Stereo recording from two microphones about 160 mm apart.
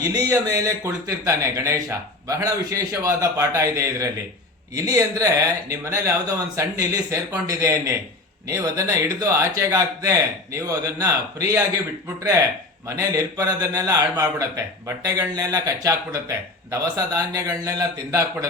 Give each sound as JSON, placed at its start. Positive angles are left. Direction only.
{"t": 0.0, "sound": "speech", "side_deg": -20}
{"t": 13.0, "sound": "speech", "side_deg": -20}